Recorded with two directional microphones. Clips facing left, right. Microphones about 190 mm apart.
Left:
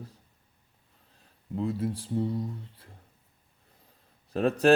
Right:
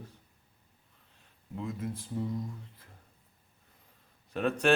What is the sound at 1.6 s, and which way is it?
Speech, 35° left (ahead or behind).